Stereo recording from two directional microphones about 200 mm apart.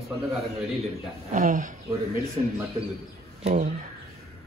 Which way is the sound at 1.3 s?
40° right (ahead or behind).